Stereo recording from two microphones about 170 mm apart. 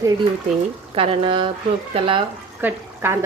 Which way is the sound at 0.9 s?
30° right (ahead or behind).